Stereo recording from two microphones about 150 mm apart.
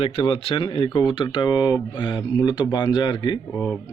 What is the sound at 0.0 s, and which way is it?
Speech, 40° left (ahead or behind).